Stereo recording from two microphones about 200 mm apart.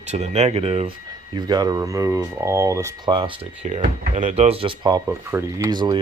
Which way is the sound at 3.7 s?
35° right (ahead or behind).